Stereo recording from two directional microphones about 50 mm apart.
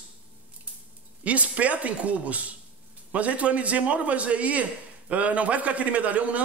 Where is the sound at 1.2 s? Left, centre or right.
Right.